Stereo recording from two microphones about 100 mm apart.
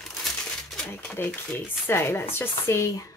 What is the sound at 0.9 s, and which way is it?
Speech, 20° left (ahead or behind).